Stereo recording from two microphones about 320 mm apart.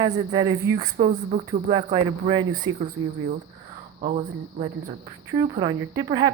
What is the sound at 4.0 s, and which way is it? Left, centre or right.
Speech, right.